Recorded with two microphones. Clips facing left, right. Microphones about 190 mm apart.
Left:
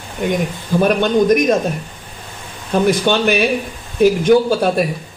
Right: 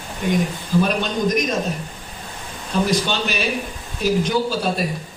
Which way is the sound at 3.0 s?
60° left (ahead or behind).